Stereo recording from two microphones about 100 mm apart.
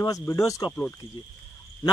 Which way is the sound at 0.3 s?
35° left (ahead or behind).